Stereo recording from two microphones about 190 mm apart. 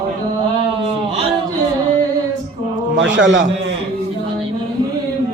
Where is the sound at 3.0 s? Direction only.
75° right (ahead or behind).